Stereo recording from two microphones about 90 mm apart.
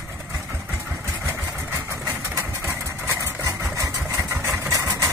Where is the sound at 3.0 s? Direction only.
35° right (ahead or behind).